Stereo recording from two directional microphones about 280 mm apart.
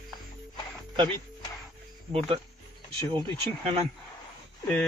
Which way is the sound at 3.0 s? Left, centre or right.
Centre.